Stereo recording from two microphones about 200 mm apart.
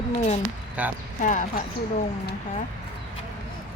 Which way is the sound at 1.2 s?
40° left (ahead or behind).